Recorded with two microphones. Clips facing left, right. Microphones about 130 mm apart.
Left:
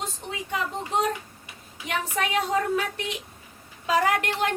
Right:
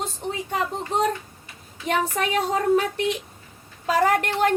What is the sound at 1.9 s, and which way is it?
Speech, 40° right (ahead or behind).